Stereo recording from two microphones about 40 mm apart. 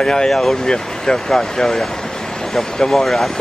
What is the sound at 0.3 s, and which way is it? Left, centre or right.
Speech, centre.